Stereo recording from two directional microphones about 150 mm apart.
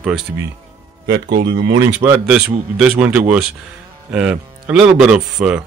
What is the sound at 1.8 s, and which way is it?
Speech, 15° right (ahead or behind).